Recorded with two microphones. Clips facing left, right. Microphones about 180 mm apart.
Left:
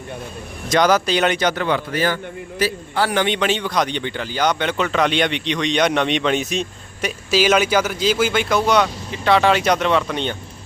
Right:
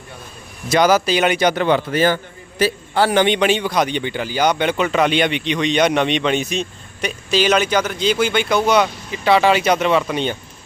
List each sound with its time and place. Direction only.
0.7 s speech: 5° right (ahead or behind)
1.6 s a man's voice: 25° right (ahead or behind); by 10.3 s 5° right (ahead or behind)